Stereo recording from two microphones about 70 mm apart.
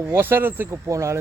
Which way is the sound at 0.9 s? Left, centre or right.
Right.